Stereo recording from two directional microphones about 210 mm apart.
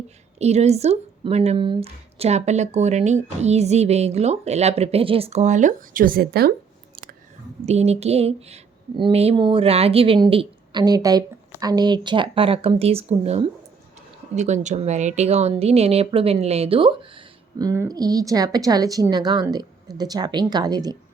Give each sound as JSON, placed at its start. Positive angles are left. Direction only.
{"t": 0.3, "sound": "speech", "side_deg": -30}
{"t": 6.9, "sound": "a sound", "side_deg": -45}
{"t": 7.6, "sound": "speech", "side_deg": -30}